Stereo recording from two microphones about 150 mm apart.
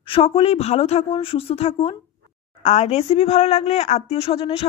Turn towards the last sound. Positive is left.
turn(degrees=40)  # may be behind; listen again after turning